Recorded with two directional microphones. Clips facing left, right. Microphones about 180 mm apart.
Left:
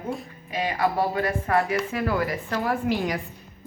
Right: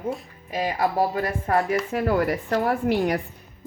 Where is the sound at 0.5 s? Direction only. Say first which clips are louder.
Right 1 dB; 40° right (ahead or behind).